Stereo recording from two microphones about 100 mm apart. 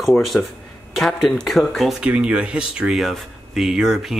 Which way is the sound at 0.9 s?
Centre (ahead or behind).